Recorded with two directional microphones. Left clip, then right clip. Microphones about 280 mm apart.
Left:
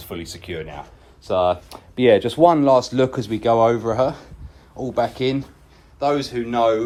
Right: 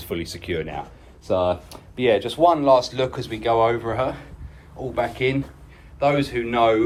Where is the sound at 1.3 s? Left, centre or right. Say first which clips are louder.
Left 2 dB; centre.